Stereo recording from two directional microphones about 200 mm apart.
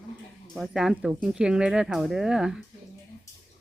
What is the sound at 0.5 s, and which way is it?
Speech, centre (ahead or behind).